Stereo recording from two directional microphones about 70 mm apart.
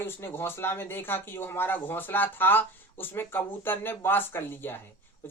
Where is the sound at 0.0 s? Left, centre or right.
Left.